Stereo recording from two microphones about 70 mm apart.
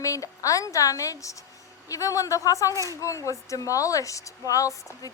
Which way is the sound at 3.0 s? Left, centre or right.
Left.